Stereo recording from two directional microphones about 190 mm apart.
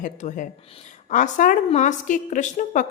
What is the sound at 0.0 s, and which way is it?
A woman's voice, 40° left (ahead or behind).